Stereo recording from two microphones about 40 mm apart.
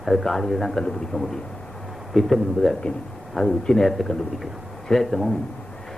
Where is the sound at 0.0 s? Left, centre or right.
Centre.